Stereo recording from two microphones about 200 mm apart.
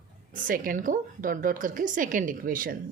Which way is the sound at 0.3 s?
45° right (ahead or behind).